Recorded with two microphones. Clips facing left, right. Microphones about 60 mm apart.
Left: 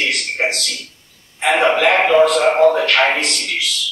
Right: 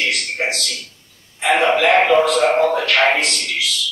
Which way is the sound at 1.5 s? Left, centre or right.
Left.